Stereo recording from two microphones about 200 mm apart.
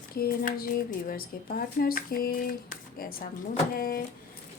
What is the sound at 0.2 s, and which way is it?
Speech, 45° left (ahead or behind).